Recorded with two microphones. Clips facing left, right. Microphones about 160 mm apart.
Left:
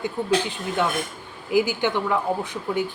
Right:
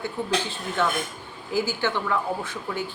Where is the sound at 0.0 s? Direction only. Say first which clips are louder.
Left 4 dB; 15° left (ahead or behind).